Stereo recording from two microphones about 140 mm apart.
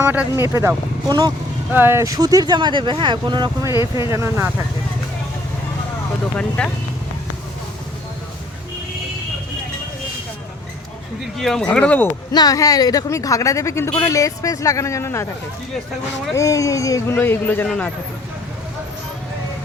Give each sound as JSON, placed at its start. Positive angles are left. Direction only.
{"t": 0.0, "sound": "speech", "side_deg": -15}
{"t": 1.0, "sound": "speech", "side_deg": -30}
{"t": 1.7, "sound": "speech", "side_deg": -15}
{"t": 3.7, "sound": "speech", "side_deg": 30}
{"t": 4.1, "sound": "speech", "side_deg": -20}
{"t": 6.6, "sound": "speech", "side_deg": 5}
{"t": 11.3, "sound": "speech", "side_deg": 5}
{"t": 12.3, "sound": "speech", "side_deg": 30}
{"t": 16.3, "sound": "speech", "side_deg": 20}